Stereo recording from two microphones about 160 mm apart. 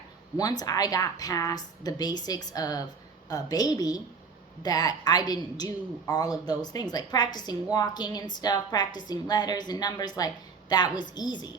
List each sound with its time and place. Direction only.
0.6 s a woman's voice: 25° left (ahead or behind)